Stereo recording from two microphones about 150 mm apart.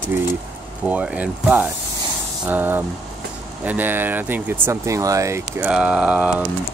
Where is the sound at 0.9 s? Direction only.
10° right (ahead or behind).